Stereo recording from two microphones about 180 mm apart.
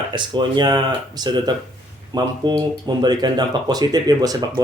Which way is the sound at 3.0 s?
25° right (ahead or behind).